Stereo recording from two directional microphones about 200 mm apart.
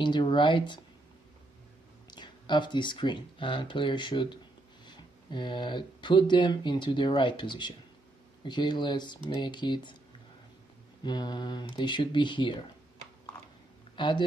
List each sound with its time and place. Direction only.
0.0 s speech: 25° left (ahead or behind)
2.0 s speech: 20° left (ahead or behind)
11.1 s speech: 20° left (ahead or behind)
13.9 s speech: 25° left (ahead or behind)